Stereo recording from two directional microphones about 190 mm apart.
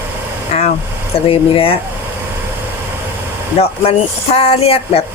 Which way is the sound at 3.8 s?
30° left (ahead or behind).